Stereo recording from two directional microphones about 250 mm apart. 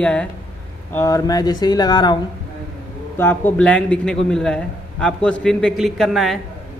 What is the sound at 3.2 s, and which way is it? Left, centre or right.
A man's voice, centre.